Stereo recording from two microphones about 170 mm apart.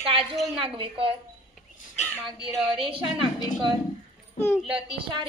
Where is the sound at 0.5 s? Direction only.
30° right (ahead or behind).